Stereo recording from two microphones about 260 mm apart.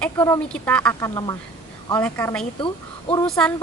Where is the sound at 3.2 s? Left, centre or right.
Centre.